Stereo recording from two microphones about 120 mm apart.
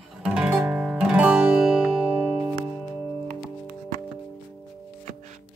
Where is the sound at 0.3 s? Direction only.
10° right (ahead or behind).